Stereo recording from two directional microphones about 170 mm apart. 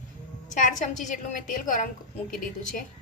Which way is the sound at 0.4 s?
50° left (ahead or behind).